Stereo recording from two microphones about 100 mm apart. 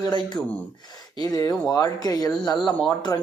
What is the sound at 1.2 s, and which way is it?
Speech, 40° left (ahead or behind).